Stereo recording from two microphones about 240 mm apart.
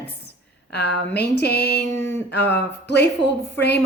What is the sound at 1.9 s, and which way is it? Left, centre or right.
Speech, centre.